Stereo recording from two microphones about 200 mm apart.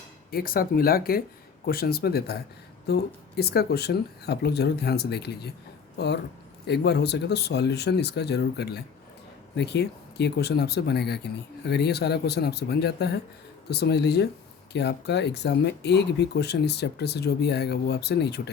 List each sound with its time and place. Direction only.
0.3 s speech: 50° left (ahead or behind)